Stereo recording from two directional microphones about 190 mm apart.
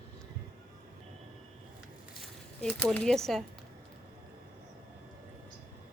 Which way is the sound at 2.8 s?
5° left (ahead or behind).